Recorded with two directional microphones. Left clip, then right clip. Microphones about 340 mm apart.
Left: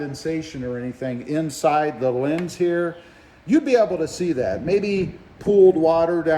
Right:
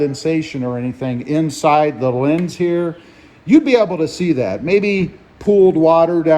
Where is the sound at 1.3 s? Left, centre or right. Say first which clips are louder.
Right 6 dB; centre.